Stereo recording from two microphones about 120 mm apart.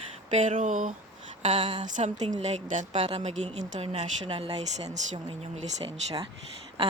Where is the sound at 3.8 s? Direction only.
55° right (ahead or behind).